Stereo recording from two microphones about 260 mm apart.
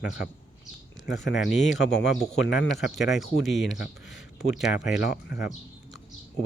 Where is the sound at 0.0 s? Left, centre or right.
Left.